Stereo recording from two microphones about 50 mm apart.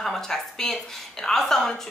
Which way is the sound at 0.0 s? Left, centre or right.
Centre.